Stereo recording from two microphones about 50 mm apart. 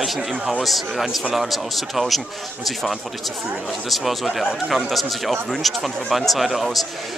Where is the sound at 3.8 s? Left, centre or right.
Centre.